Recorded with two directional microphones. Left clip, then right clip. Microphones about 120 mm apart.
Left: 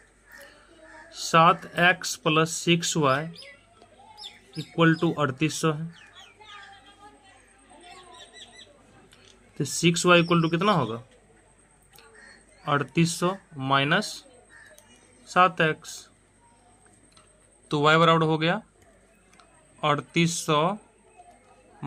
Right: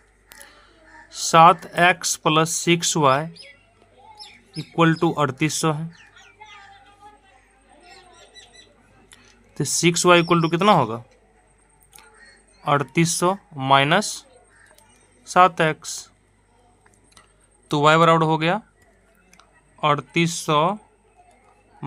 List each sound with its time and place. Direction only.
1.1 s speech: 65° right (ahead or behind)
4.7 s speech: 60° right (ahead or behind)
9.0 s speech: 60° right (ahead or behind)
12.6 s speech: 55° right (ahead or behind)
17.7 s speech: 55° right (ahead or behind)
19.4 s speech: 40° right (ahead or behind)